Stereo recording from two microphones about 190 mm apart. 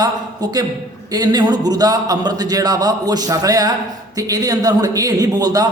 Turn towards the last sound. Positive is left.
turn(degrees=-20)  # may be behind; listen again after turning